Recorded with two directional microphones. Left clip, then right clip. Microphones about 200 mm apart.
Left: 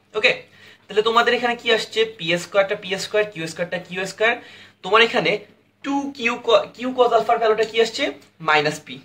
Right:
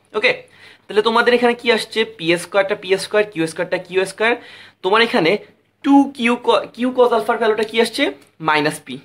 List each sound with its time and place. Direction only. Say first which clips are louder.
0.1 s speech: right 2 dB; 50° right (ahead or behind)